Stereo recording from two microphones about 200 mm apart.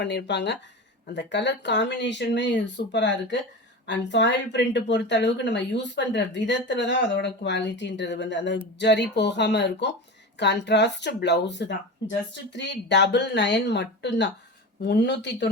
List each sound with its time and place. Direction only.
0.0 s speech: 60° left (ahead or behind)